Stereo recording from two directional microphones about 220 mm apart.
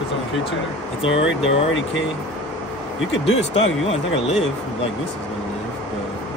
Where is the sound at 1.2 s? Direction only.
60° left (ahead or behind).